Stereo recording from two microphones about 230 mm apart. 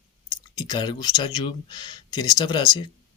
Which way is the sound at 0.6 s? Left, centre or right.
Centre.